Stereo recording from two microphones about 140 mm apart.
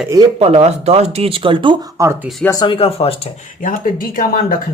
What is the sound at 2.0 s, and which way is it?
Speech, 20° right (ahead or behind).